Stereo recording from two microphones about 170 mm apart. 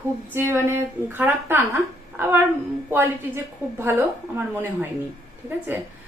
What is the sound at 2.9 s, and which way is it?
Speech, 10° right (ahead or behind).